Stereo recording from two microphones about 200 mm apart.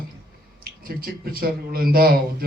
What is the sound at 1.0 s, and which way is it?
A man's voice, 50° right (ahead or behind).